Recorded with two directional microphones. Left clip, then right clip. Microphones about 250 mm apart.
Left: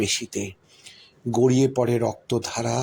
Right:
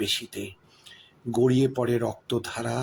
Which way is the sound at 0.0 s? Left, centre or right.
Centre.